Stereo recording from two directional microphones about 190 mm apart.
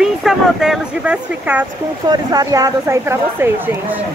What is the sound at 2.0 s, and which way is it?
Speech, 20° right (ahead or behind).